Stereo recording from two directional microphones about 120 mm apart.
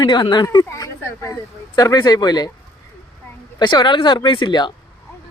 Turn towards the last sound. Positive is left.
turn(degrees=40)  # may be behind; listen again after turning